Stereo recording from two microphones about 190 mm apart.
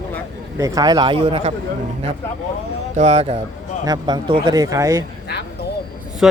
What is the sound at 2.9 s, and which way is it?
Speech, 35° right (ahead or behind).